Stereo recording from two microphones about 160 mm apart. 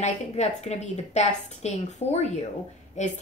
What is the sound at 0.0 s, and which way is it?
A woman's voice, 45° left (ahead or behind).